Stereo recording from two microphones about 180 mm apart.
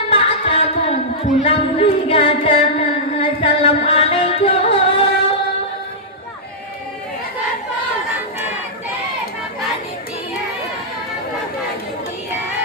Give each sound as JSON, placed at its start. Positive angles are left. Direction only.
{"t": 0.1, "sound": "music", "side_deg": 30}